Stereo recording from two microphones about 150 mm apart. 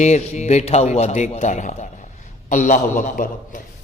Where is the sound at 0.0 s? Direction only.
50° left (ahead or behind).